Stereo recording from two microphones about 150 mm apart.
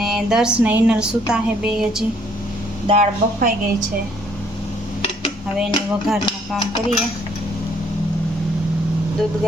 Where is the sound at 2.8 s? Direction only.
50° right (ahead or behind).